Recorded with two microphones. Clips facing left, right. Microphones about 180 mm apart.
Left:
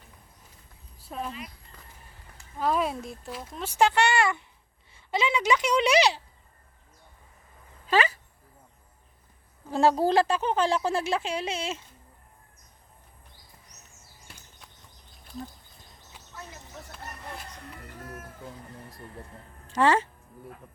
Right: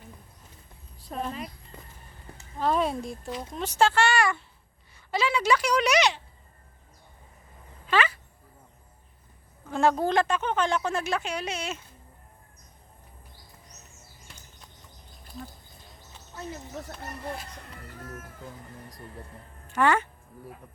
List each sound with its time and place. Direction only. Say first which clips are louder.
1.0 s speech: right 2 dB; 5° left (ahead or behind)
2.6 s speech: right 1 dB; 5° left (ahead or behind); by 6.2 s 35° left (ahead or behind)
7.9 s a sound: left 1 dB; 40° left (ahead or behind)
9.6 s a woman's voice: left 2 dB; 35° left (ahead or behind)
19.7 s speech: left 1 dB; 30° left (ahead or behind)